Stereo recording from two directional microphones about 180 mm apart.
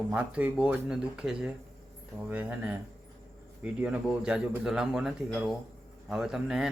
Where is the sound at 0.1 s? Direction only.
10° right (ahead or behind).